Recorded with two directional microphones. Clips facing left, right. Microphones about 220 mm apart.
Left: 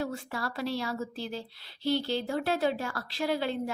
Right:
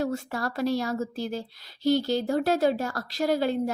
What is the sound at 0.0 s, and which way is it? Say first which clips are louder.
A woman's voice: right 5 dB; 45° right (ahead or behind).